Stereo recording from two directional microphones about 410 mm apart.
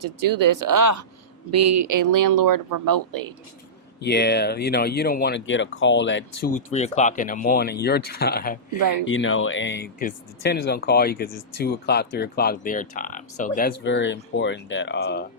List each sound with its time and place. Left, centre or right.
0.0 s speech: right
4.0 s speech: left
6.7 s speech: centre